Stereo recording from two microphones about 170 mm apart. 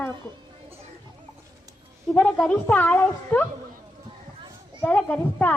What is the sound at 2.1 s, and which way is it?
A child's voice, 5° left (ahead or behind).